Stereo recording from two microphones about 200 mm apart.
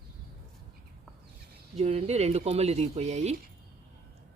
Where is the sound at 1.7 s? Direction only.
35° right (ahead or behind).